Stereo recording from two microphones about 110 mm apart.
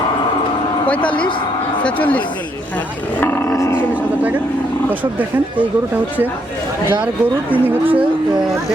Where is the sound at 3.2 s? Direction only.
20° left (ahead or behind).